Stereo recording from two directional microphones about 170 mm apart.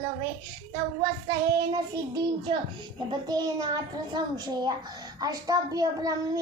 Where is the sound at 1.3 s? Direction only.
20° right (ahead or behind).